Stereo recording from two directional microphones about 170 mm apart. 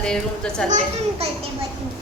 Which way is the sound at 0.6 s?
45° right (ahead or behind).